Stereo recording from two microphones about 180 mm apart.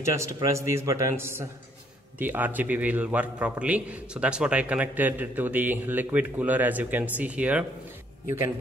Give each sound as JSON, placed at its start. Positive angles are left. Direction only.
{"t": 0.0, "sound": "a man's voice", "side_deg": -15}